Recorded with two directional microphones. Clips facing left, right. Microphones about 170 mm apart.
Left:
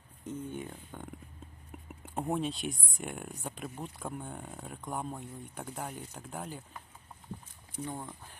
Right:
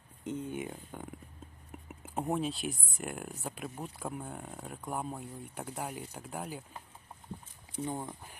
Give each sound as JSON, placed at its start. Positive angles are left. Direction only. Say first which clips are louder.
{"t": 0.3, "sound": "speech", "louder": "right 1 dB", "side_deg": -15}
{"t": 7.9, "sound": "speech", "louder": "right 4 dB", "side_deg": -15}